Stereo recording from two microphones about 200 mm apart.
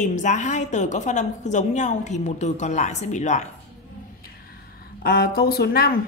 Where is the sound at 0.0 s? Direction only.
35° left (ahead or behind).